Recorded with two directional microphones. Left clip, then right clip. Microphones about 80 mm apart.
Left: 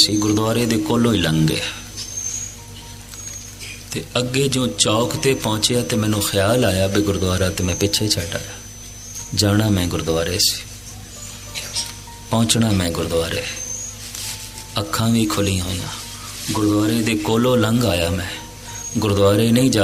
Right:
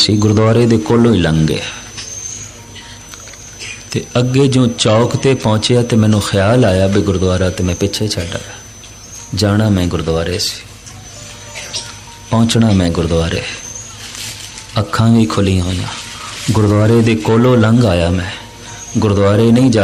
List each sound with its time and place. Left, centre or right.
0.0 s speech: left
3.8 s speech: left
12.3 s speech: left
14.7 s speech: left